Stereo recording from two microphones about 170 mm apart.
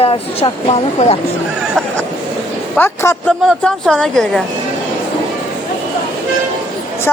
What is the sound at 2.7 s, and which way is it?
Speech, 15° left (ahead or behind).